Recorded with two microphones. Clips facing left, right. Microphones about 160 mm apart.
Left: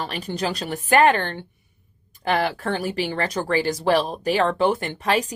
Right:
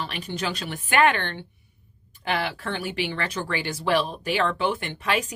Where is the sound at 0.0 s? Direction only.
40° left (ahead or behind).